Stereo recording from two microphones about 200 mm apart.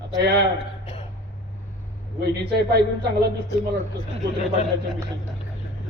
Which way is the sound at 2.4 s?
55° right (ahead or behind).